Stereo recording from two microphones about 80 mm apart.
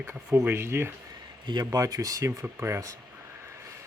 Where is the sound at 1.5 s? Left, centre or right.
Right.